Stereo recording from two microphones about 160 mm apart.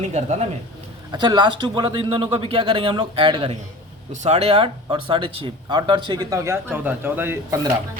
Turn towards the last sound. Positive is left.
turn(degrees=-15)  # may be behind; listen again after turning